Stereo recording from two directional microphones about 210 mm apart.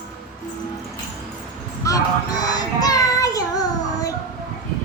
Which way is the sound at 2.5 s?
20° left (ahead or behind).